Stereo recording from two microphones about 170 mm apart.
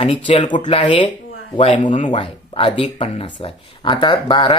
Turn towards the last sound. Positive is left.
turn(degrees=30)  # may be behind; listen again after turning